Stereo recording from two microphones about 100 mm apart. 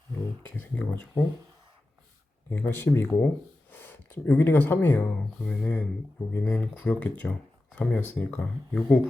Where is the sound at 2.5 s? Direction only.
20° left (ahead or behind).